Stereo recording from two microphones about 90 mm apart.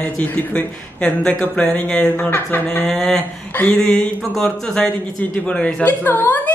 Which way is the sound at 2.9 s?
5° left (ahead or behind).